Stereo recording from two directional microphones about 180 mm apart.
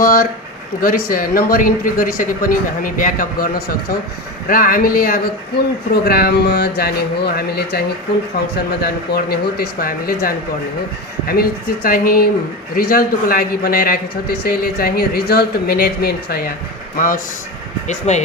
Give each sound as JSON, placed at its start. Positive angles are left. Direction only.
{"t": 0.0, "sound": "a man's voice", "side_deg": 50}
{"t": 17.8, "sound": "speech", "side_deg": 40}